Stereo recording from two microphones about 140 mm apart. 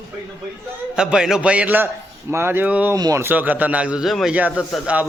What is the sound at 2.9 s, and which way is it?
Speech, 25° right (ahead or behind).